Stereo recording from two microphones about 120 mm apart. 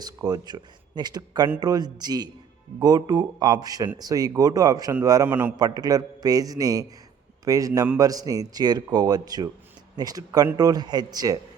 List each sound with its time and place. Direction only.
0.0 s speech: 30° right (ahead or behind)
5.3 s a man's voice: 15° right (ahead or behind)
5.5 s speech: 35° right (ahead or behind)